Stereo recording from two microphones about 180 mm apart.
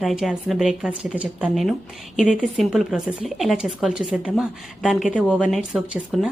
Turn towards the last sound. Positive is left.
turn(degrees=-5)  # may be behind; listen again after turning